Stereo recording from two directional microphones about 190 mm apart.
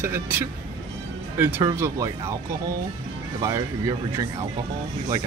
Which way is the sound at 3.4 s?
20° right (ahead or behind).